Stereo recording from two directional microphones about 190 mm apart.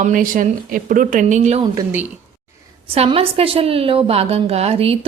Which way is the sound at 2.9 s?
30° right (ahead or behind).